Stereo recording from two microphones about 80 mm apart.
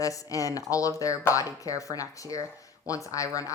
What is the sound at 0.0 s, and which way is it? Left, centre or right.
A woman's voice, left.